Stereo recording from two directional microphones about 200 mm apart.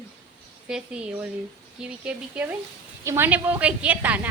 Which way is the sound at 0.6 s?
5° right (ahead or behind).